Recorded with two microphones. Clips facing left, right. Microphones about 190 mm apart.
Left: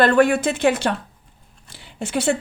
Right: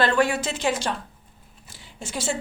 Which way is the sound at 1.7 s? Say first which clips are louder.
Left 9 dB; 65° left (ahead or behind).